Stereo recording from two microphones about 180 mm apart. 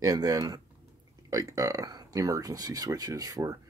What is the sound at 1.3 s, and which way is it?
Speech, 20° right (ahead or behind).